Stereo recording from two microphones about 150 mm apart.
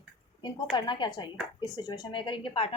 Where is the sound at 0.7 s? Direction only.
30° left (ahead or behind).